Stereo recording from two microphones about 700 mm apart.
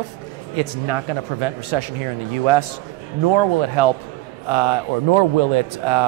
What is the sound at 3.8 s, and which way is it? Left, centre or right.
A man's voice, right.